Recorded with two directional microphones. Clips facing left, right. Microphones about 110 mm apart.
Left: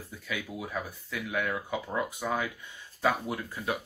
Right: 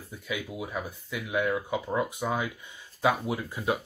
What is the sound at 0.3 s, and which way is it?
Speech, 20° right (ahead or behind).